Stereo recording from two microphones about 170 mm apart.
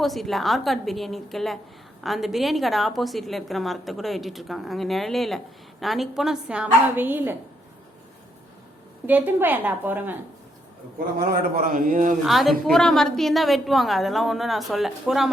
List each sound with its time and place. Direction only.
0.0 s a woman's voice: centre (ahead or behind)
9.0 s a woman's voice: 10° right (ahead or behind)
11.2 s a man's voice: 55° right (ahead or behind)
12.2 s a woman's voice: centre (ahead or behind)